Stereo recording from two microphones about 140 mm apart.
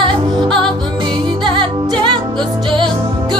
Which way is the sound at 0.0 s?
35° right (ahead or behind).